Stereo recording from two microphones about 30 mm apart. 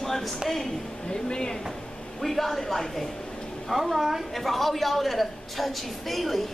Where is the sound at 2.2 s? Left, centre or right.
Centre.